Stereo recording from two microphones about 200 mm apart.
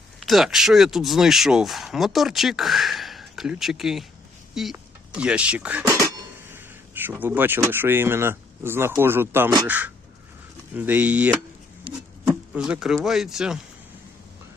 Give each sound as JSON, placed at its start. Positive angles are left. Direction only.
{"t": 0.2, "sound": "speech", "side_deg": 0}
{"t": 11.9, "sound": "a sound", "side_deg": -25}
{"t": 12.5, "sound": "speech", "side_deg": -5}